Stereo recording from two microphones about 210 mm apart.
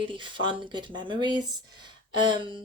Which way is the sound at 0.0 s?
25° right (ahead or behind).